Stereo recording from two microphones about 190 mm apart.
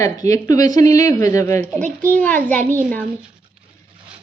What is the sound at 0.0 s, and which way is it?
A child's voice, 15° left (ahead or behind).